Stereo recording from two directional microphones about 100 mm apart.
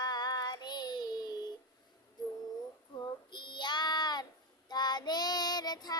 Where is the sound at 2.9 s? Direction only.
50° left (ahead or behind).